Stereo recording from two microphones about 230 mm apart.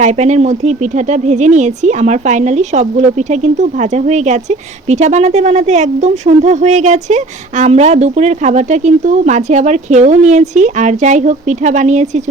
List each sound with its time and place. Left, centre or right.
0.0 s speech: right